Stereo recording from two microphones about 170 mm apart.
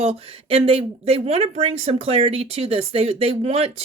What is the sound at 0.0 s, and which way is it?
Speech, 35° right (ahead or behind).